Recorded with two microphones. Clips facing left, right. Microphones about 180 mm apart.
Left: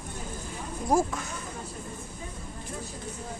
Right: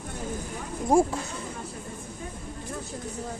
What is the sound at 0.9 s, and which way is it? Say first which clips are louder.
Speech: right 4 dB; 30° right (ahead or behind).